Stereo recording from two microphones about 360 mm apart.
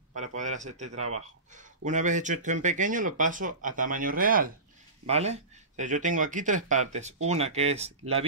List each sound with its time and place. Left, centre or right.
0.1 s speech: centre